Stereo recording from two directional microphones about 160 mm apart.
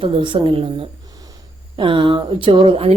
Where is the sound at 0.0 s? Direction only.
30° right (ahead or behind).